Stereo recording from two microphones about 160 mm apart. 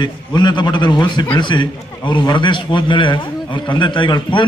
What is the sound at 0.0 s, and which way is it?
A man's voice, 25° left (ahead or behind).